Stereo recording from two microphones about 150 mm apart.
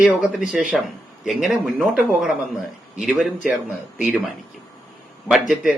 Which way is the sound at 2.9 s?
5° right (ahead or behind).